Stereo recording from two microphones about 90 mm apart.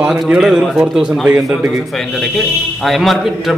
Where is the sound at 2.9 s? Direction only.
Centre (ahead or behind).